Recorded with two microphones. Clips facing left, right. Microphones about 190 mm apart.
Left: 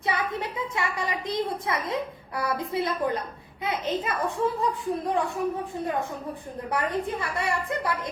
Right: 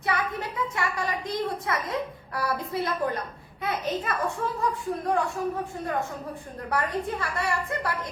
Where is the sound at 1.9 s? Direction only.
20° left (ahead or behind).